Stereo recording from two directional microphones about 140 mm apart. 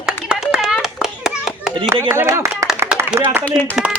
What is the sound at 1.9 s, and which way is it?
A man's voice, 15° right (ahead or behind).